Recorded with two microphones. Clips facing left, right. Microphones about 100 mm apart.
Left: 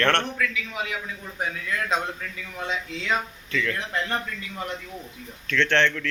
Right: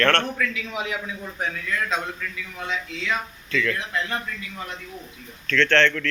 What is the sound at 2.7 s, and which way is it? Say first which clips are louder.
Speech: left 1 dB; 20° left (ahead or behind).